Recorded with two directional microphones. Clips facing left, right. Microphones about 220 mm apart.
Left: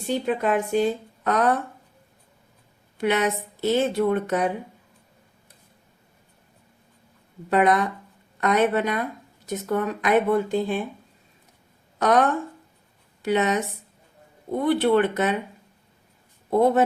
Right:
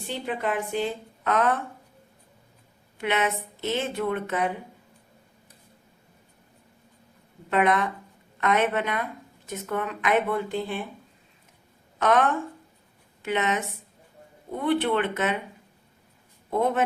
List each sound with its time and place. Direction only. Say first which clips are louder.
0.1 s a woman's voice: left 6 dB; 45° left (ahead or behind)
3.0 s a woman's voice: left 4 dB; 40° left (ahead or behind)
7.5 s a woman's voice: left 3 dB; 35° left (ahead or behind)
11.9 s speech: left 2 dB; 40° left (ahead or behind)
13.2 s a woman's voice: left 4 dB; 35° left (ahead or behind)
16.5 s a woman's voice: left 6 dB; 35° left (ahead or behind)